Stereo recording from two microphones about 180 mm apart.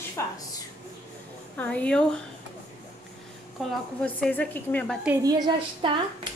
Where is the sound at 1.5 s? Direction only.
5° left (ahead or behind).